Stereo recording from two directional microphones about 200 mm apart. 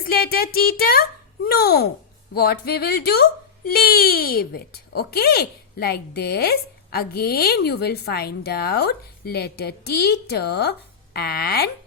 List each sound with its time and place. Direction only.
0.1 s speech: 50° left (ahead or behind)